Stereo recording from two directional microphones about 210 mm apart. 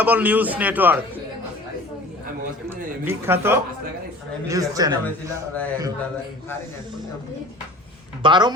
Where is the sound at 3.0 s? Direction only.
10° right (ahead or behind).